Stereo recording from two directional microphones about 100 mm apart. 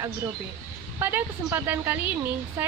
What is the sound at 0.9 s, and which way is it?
Speech, 20° right (ahead or behind).